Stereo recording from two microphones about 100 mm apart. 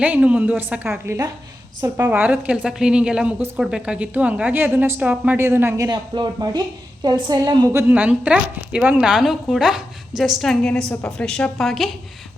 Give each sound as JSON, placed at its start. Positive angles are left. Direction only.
{"t": 0.0, "sound": "a man's voice", "side_deg": -15}
{"t": 5.8, "sound": "speech", "side_deg": -45}
{"t": 7.7, "sound": "a man's voice", "side_deg": -25}
{"t": 7.9, "sound": "a woman's voice", "side_deg": -15}